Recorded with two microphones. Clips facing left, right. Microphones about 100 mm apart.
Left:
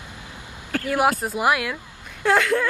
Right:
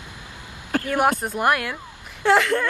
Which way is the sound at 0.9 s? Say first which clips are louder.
Left 1 dB; 5° left (ahead or behind).